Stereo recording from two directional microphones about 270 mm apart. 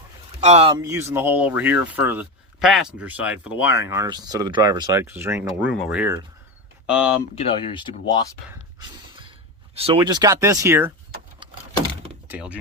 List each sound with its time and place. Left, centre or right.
0.3 s speech: right; by 7.1 s centre
7.3 s speech: left
9.7 s speech: centre
12.3 s speech: centre